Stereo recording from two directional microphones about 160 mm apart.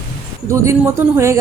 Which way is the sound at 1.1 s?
15° right (ahead or behind).